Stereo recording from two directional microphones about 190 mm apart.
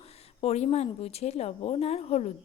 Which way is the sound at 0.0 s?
35° left (ahead or behind).